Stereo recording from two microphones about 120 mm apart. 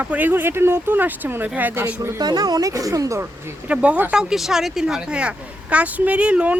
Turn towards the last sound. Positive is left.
turn(degrees=-10)  # may be behind; listen again after turning